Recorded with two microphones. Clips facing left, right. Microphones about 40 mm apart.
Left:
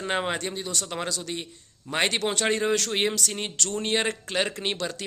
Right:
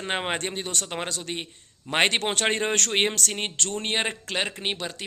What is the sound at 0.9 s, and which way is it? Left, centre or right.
Speech, right.